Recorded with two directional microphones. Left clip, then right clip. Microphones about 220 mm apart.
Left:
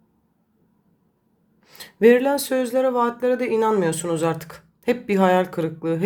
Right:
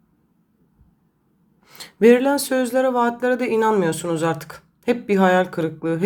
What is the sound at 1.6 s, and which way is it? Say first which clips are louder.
Speech: even; 5° right (ahead or behind).